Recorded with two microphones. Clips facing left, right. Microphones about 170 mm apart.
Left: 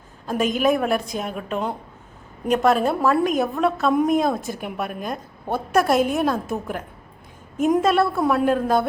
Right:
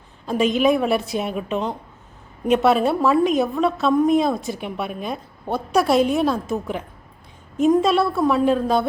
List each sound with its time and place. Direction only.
0.6 s a woman's voice: centre (ahead or behind)